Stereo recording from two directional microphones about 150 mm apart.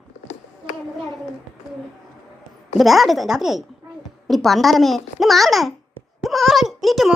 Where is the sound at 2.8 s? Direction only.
Centre (ahead or behind).